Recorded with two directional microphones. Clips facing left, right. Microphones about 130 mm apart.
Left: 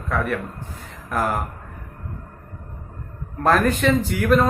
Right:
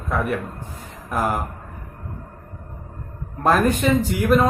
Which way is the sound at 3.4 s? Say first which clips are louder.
Even; 15° right (ahead or behind).